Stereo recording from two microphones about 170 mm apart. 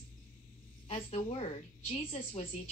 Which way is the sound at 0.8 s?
35° left (ahead or behind).